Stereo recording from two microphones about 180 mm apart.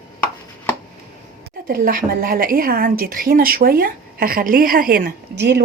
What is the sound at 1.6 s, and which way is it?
A woman's voice, 55° right (ahead or behind).